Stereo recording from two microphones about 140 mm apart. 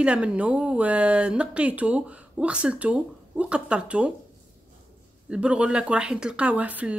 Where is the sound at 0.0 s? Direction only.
10° right (ahead or behind).